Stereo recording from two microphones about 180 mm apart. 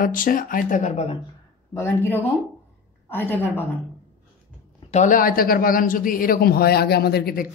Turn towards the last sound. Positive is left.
turn(degrees=55)  # may be behind; listen again after turning